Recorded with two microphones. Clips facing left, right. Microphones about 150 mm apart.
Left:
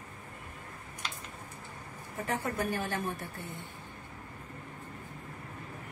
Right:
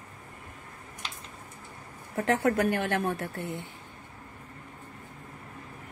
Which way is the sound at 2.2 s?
70° right (ahead or behind).